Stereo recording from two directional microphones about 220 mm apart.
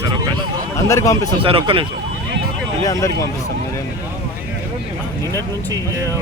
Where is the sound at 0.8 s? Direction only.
15° left (ahead or behind).